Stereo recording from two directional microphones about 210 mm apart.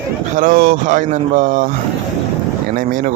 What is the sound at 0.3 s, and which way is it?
Speech, 40° right (ahead or behind).